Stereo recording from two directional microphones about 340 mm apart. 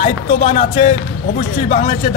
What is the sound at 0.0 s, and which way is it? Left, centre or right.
A man's voice, centre.